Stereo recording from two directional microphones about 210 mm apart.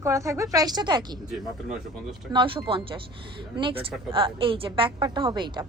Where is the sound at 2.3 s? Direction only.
25° right (ahead or behind).